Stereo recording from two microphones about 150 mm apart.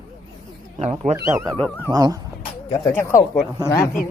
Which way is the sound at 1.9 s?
25° right (ahead or behind).